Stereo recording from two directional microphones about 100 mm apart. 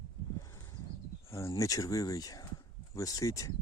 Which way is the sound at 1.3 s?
30° left (ahead or behind).